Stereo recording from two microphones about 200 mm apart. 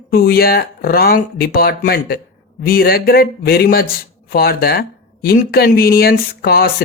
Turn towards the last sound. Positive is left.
turn(degrees=50)  # may be behind; listen again after turning